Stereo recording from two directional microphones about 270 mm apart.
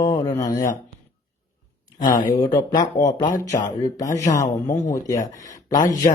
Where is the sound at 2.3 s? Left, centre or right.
Centre.